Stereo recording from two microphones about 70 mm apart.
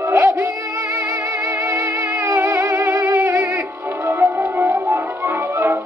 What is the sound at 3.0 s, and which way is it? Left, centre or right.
Music, right.